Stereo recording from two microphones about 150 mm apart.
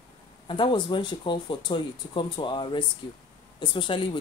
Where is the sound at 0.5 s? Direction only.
35° left (ahead or behind).